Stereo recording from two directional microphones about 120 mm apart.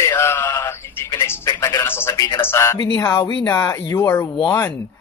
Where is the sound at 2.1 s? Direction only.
30° left (ahead or behind).